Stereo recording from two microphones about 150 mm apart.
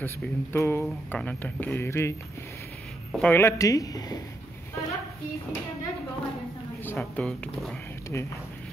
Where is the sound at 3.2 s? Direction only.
15° left (ahead or behind).